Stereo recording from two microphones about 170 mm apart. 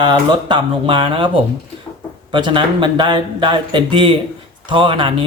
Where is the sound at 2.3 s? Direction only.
30° right (ahead or behind).